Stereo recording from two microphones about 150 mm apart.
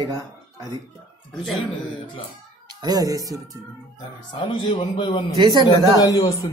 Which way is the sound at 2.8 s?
25° right (ahead or behind).